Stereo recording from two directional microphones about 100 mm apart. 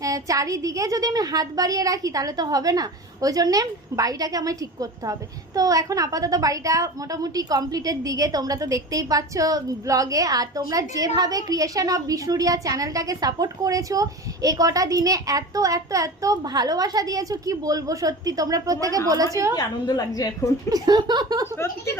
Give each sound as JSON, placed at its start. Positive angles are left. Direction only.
{"t": 0.0, "sound": "a woman's voice", "side_deg": -35}
{"t": 19.5, "sound": "a woman's voice", "side_deg": 40}
{"t": 20.7, "sound": "a woman's voice", "side_deg": -40}
{"t": 21.4, "sound": "a woman's voice", "side_deg": 25}